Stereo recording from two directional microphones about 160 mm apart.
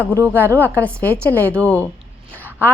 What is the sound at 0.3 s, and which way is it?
Speech, 15° right (ahead or behind).